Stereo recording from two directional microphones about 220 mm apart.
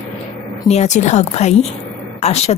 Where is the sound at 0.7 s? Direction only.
30° left (ahead or behind).